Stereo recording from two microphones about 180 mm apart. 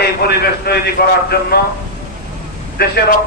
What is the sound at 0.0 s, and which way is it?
A man's voice, 60° left (ahead or behind).